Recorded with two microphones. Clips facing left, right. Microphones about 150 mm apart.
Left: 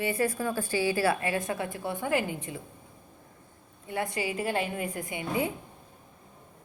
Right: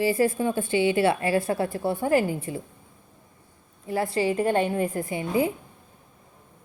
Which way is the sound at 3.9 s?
30° right (ahead or behind).